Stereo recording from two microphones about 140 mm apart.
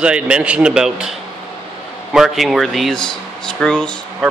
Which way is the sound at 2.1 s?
Centre (ahead or behind).